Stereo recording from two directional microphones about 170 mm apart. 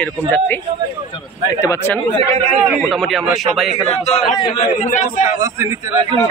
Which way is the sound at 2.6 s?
Centre (ahead or behind).